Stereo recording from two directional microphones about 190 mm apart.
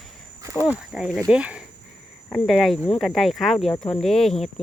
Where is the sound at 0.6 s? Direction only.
5° right (ahead or behind).